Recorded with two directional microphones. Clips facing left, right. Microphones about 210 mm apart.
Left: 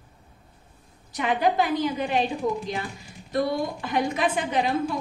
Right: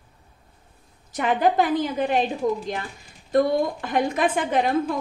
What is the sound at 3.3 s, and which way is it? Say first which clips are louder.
A woman's voice: right 5 dB; 50° right (ahead or behind).